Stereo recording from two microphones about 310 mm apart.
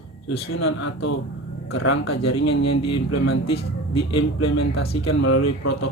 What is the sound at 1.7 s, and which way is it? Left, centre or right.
Speech, left.